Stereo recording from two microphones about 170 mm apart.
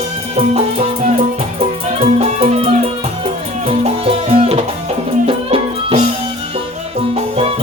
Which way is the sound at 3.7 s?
35° right (ahead or behind).